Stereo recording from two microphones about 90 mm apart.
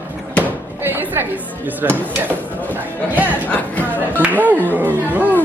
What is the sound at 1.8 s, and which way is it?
Speech, 20° right (ahead or behind).